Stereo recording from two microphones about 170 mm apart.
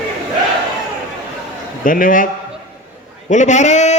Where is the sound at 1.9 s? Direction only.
55° left (ahead or behind).